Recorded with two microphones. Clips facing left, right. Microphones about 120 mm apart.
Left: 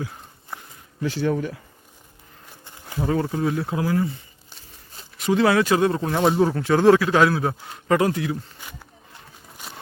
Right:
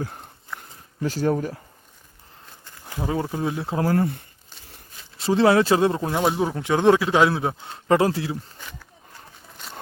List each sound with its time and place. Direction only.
1.0 s speech: 40° right (ahead or behind)
2.6 s insect: 20° left (ahead or behind)
3.0 s a man's voice: 15° right (ahead or behind)
3.8 s speech: 50° right (ahead or behind)
5.1 s a man's voice: 30° right (ahead or behind)
6.1 s a man's voice: 5° right (ahead or behind); by 8.4 s 30° right (ahead or behind)